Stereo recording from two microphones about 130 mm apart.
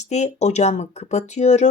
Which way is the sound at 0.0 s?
60° left (ahead or behind).